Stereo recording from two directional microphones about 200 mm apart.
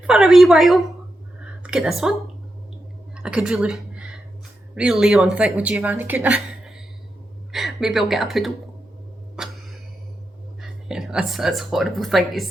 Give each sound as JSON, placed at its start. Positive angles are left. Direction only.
{"t": 0.1, "sound": "speech", "side_deg": 0}
{"t": 3.2, "sound": "a sound", "side_deg": -5}
{"t": 4.7, "sound": "a woman's voice", "side_deg": -5}
{"t": 9.3, "sound": "cough", "side_deg": -5}
{"t": 10.6, "sound": "speech", "side_deg": 0}